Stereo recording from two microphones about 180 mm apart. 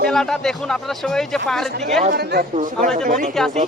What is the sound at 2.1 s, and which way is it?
Speech, 60° right (ahead or behind).